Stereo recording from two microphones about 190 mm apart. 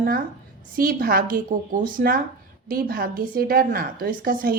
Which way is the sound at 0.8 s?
50° right (ahead or behind).